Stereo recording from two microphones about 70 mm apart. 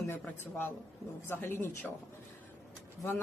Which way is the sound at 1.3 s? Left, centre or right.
Left.